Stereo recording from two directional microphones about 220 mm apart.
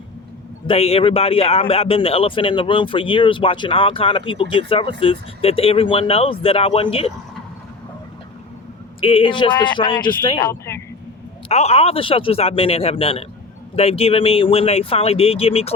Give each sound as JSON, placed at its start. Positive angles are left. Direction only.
{"t": 0.7, "sound": "speech", "side_deg": 25}
{"t": 9.0, "sound": "speech", "side_deg": 25}
{"t": 11.4, "sound": "speech", "side_deg": 30}